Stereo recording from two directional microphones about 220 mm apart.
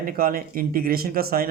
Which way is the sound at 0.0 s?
40° right (ahead or behind).